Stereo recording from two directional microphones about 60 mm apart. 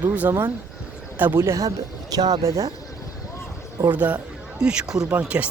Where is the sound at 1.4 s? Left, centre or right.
Right.